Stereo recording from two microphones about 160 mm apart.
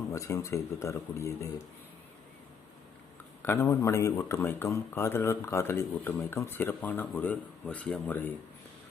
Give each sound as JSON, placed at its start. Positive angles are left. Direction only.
{"t": 0.1, "sound": "speech", "side_deg": 20}
{"t": 3.4, "sound": "speech", "side_deg": 15}